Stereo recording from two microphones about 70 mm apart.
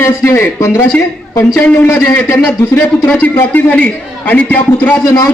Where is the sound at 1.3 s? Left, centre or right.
Left.